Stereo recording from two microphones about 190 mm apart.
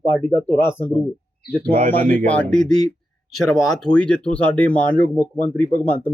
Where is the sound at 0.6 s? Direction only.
15° left (ahead or behind).